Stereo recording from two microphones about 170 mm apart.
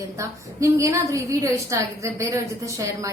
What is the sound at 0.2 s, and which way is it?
A woman's voice, 20° right (ahead or behind).